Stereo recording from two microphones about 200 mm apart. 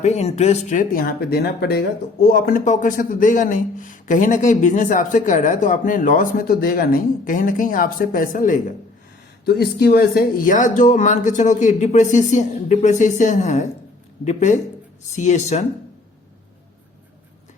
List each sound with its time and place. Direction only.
0.0 s speech: 35° left (ahead or behind)